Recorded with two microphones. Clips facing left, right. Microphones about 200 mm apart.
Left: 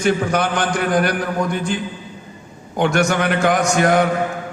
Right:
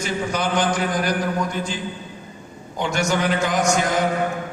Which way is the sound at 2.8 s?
60° left (ahead or behind).